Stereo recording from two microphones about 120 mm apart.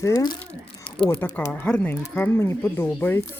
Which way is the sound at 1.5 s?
15° left (ahead or behind).